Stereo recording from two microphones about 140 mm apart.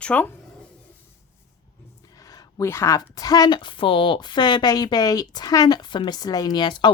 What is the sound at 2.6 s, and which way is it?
Speech, 20° left (ahead or behind).